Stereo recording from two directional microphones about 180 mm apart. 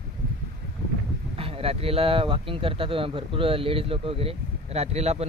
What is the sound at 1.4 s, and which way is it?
Speech, 30° right (ahead or behind).